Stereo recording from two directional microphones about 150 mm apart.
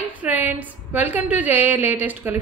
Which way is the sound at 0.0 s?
10° right (ahead or behind).